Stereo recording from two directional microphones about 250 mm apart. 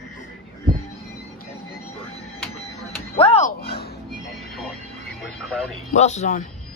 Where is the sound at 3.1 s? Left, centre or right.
Left.